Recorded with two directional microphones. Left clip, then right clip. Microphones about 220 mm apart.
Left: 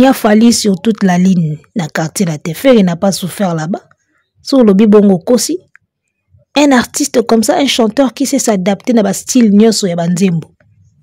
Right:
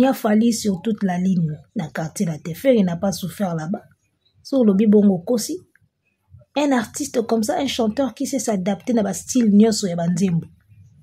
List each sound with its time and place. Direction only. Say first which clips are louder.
0.0 s speech: left 10 dB; 40° left (ahead or behind)